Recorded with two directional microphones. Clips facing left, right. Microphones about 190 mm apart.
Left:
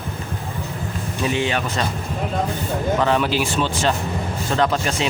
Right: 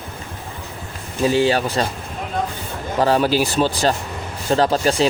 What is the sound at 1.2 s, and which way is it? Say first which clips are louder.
Speech: right 6 dB; 35° right (ahead or behind).